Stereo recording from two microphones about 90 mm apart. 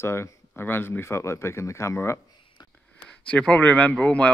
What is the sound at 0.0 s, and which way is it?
Speech, 30° left (ahead or behind).